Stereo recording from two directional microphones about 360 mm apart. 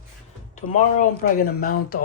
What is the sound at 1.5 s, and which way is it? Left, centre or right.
Speech, left.